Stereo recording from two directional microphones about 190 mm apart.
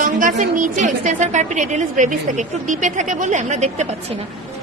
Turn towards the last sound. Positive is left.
turn(degrees=-35)  # may be behind; listen again after turning